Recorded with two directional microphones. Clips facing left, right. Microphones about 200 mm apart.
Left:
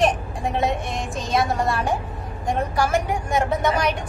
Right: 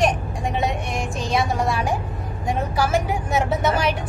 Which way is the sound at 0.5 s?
Centre (ahead or behind).